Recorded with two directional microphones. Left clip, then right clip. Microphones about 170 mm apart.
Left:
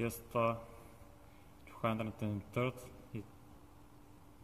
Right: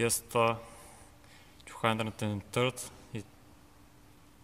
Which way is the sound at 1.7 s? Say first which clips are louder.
Right 7 dB; 60° right (ahead or behind).